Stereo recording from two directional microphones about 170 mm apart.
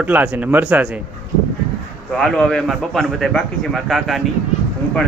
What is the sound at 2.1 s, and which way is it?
A man's voice, 5° left (ahead or behind).